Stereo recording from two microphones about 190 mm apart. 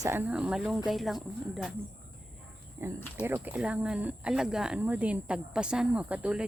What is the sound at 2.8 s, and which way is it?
Speech, 15° right (ahead or behind).